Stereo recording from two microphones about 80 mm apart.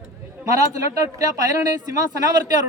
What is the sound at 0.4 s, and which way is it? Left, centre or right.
Speech, right.